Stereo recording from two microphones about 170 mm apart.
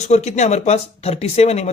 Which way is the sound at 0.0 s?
40° left (ahead or behind).